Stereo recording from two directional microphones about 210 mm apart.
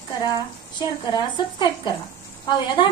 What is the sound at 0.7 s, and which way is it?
A woman's voice, 20° left (ahead or behind).